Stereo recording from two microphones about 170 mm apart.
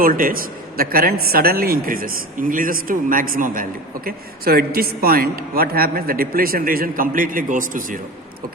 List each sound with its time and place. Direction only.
0.0 s a man's voice: 55° right (ahead or behind)